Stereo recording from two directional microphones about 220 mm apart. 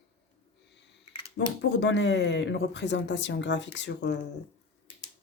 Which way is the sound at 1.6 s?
55° left (ahead or behind).